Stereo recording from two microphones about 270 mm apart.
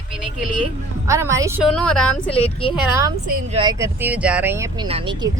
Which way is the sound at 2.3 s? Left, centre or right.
Left.